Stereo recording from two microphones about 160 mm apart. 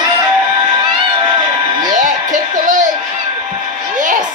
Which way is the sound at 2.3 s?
50° right (ahead or behind).